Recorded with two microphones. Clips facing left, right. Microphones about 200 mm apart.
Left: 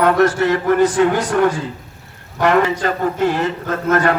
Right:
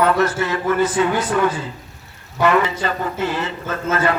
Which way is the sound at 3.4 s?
55° left (ahead or behind).